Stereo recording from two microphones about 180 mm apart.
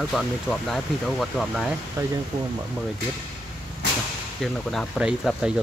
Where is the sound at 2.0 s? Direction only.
15° right (ahead or behind).